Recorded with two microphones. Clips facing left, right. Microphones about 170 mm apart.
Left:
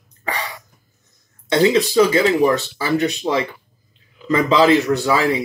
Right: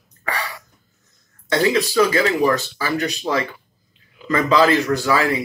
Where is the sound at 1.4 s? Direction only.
25° left (ahead or behind).